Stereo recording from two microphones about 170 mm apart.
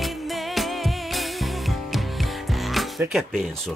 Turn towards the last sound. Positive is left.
turn(degrees=0)  # may be behind; listen again after turning